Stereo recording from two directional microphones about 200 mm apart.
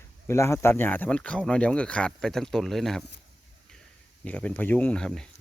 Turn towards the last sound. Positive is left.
turn(degrees=5)  # may be behind; listen again after turning